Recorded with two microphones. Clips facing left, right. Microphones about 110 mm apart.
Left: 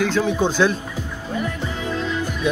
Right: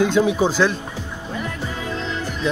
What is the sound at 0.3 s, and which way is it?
Speech, 5° right (ahead or behind).